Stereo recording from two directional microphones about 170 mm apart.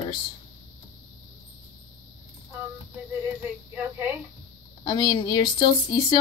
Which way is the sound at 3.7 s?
10° right (ahead or behind).